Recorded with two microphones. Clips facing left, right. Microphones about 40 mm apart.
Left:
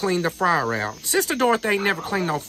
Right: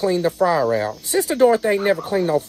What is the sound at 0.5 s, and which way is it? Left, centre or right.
Speech, centre.